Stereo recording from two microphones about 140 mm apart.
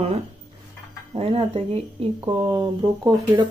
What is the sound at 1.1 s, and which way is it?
A woman's voice, 40° right (ahead or behind).